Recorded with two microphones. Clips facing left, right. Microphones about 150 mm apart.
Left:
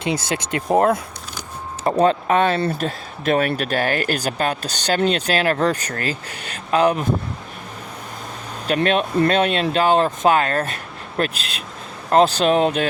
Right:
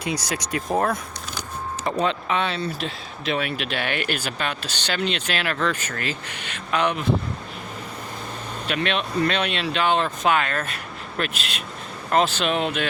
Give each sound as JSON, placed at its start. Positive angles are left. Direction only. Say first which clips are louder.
{"t": 0.0, "sound": "speech", "louder": "left 4 dB", "side_deg": 25}
{"t": 1.8, "sound": "speech", "louder": "left 8 dB", "side_deg": 45}
{"t": 8.6, "sound": "speech", "louder": "left 7 dB", "side_deg": 40}